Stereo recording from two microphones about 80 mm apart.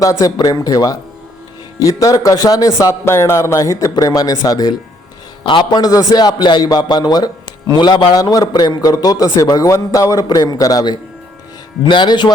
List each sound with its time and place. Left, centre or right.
0.0 s a man's voice: left
0.3 s a man's voice: left
5.4 s a man's voice: left
10.2 s a man's voice: left
11.8 s speech: left